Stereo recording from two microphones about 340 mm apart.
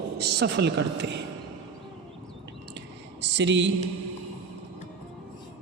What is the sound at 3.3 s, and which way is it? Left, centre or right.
Speech, right.